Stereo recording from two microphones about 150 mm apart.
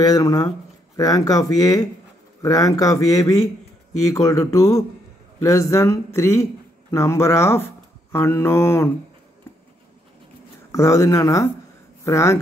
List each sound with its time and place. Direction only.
0.0 s speech: 25° left (ahead or behind)
8.1 s mantra: 20° left (ahead or behind)
10.7 s speech: 20° left (ahead or behind)